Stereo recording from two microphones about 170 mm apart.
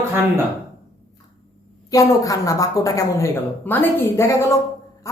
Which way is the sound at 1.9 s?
20° left (ahead or behind).